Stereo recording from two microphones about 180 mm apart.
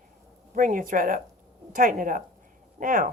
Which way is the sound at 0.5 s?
50° right (ahead or behind).